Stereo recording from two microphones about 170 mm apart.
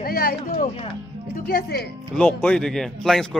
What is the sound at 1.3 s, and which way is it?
Speech, 60° left (ahead or behind).